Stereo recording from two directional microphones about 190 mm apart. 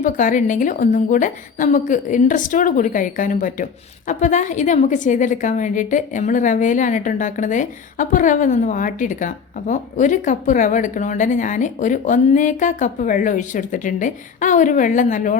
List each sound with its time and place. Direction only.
0.0 s a woman's voice: 45° left (ahead or behind)